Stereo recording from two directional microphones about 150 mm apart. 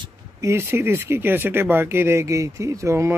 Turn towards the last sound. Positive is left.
turn(degrees=-20)  # may be behind; listen again after turning